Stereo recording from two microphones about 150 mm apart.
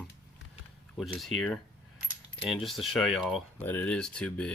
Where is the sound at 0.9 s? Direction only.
Centre (ahead or behind).